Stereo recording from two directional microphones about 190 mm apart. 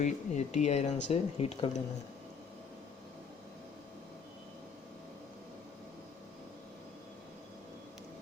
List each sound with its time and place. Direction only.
0.0 s speech: 40° left (ahead or behind)